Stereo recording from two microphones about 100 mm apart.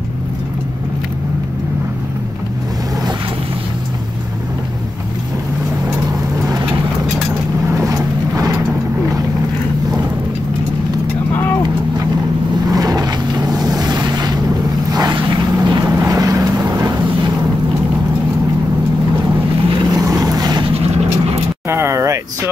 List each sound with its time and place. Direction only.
7.7 s vehicle: 35° right (ahead or behind)
12.7 s boat: 40° right (ahead or behind)
14.9 s a sound: 40° right (ahead or behind)
15.1 s vehicle: 50° right (ahead or behind)
16.0 s vehicle: 35° right (ahead or behind)
19.9 s vehicle: 35° right (ahead or behind)
21.6 s a sound: 25° right (ahead or behind)